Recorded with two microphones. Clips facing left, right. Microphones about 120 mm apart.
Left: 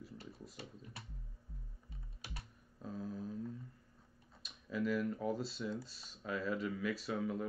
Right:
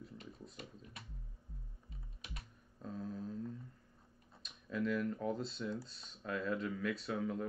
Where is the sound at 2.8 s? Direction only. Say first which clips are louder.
Even; 5° left (ahead or behind).